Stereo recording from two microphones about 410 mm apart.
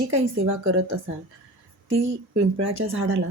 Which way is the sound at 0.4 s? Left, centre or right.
Right.